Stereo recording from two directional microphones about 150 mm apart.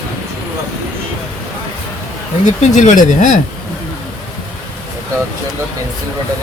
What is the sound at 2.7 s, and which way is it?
Speech, 55° left (ahead or behind).